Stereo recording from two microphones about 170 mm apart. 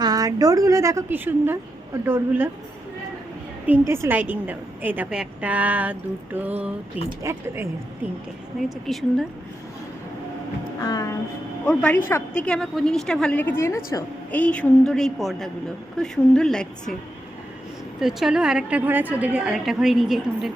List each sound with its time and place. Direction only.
0.0 s a woman's voice: 20° right (ahead or behind)
3.7 s a woman's voice: 15° right (ahead or behind)
8.9 s a woman's voice: centre (ahead or behind)
10.8 s music: 20° left (ahead or behind)
11.6 s a woman's voice: 5° left (ahead or behind)
18.0 s a woman's voice: 5° right (ahead or behind)